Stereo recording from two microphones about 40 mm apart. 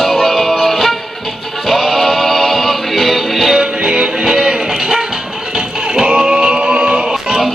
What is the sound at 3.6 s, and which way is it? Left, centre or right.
Music, right.